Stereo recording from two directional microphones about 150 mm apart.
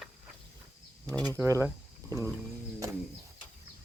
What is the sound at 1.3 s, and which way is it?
Speech, 20° right (ahead or behind).